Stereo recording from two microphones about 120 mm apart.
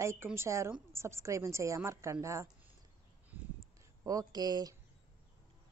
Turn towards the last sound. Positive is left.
turn(degrees=-35)  # may be behind; listen again after turning